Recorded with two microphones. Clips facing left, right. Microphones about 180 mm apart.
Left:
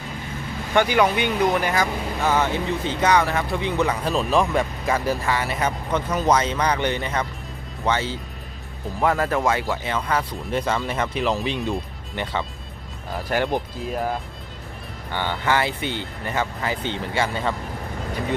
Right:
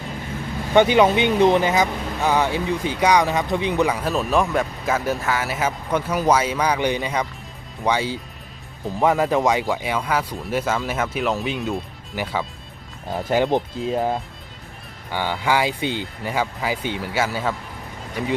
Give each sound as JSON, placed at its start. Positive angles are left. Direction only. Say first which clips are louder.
{"t": 0.7, "sound": "speech", "louder": "right 4 dB", "side_deg": -20}
{"t": 13.1, "sound": "speech", "louder": "right 4 dB", "side_deg": -20}
{"t": 15.1, "sound": "speech", "louder": "right 1 dB", "side_deg": -10}